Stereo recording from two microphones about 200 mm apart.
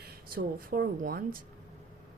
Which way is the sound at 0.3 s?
45° right (ahead or behind).